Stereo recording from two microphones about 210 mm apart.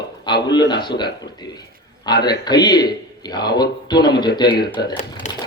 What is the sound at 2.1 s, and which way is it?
A man's voice, 20° left (ahead or behind).